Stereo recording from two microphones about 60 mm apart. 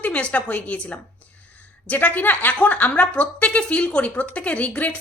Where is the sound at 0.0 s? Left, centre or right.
Left.